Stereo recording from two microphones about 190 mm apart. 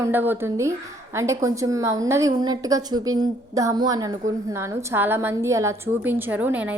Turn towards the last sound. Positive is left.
turn(degrees=-10)  # may be behind; listen again after turning